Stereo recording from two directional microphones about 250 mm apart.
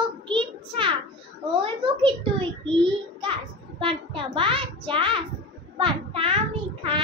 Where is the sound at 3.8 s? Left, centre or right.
Right.